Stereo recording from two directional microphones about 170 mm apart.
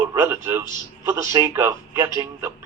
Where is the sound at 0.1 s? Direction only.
15° right (ahead or behind).